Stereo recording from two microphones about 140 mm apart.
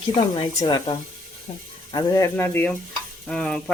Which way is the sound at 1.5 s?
45° left (ahead or behind).